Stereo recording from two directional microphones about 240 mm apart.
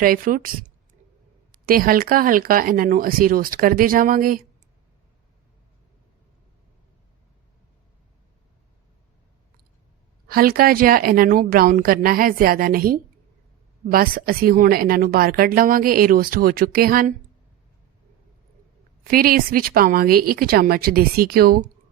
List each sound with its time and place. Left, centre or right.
0.0 s a woman's voice: right
1.6 s a woman's voice: right
10.2 s a woman's voice: right
19.0 s a woman's voice: right